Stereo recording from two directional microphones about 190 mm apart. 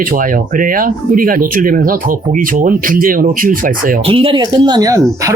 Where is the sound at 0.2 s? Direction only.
45° right (ahead or behind).